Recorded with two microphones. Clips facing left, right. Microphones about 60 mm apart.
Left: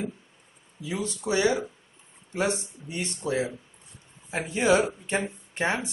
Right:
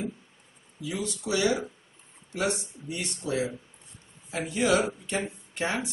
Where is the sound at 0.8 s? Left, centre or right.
Left.